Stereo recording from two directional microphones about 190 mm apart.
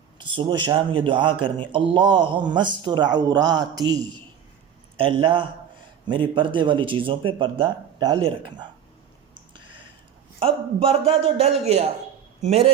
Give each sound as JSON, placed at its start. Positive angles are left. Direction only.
{"t": 0.2, "sound": "a man's voice", "side_deg": -25}
{"t": 4.9, "sound": "a man's voice", "side_deg": -25}
{"t": 9.3, "sound": "a sound", "side_deg": -25}
{"t": 10.4, "sound": "a man's voice", "side_deg": -30}